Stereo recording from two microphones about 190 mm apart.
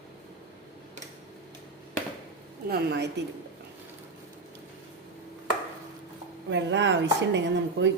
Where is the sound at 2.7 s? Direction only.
60° right (ahead or behind).